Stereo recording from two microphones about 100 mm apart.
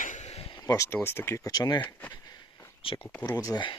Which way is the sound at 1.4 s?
40° left (ahead or behind).